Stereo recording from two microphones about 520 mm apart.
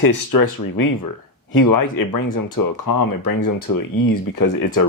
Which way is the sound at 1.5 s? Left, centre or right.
Left.